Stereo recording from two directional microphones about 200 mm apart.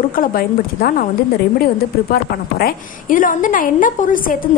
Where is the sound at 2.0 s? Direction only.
50° left (ahead or behind).